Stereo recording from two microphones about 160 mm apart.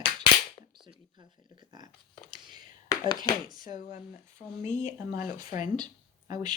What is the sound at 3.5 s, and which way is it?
Speech, 25° right (ahead or behind).